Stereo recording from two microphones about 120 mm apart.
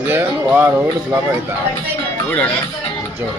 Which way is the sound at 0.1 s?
20° right (ahead or behind).